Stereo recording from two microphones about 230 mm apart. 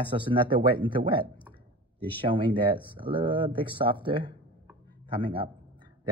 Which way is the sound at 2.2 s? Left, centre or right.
Right.